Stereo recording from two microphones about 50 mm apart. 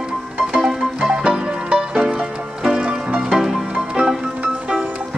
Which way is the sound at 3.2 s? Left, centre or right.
Centre.